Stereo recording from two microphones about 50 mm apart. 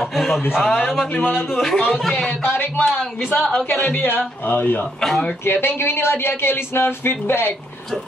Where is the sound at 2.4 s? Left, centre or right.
Left.